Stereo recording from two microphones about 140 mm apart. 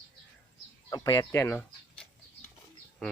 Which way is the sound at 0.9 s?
25° left (ahead or behind).